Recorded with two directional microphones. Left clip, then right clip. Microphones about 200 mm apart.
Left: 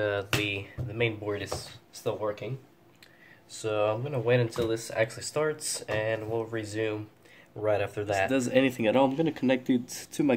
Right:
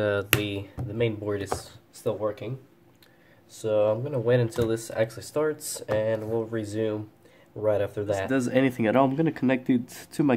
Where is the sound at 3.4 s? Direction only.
15° right (ahead or behind).